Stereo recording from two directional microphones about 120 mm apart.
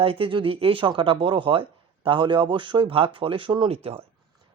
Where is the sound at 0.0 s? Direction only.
50° right (ahead or behind).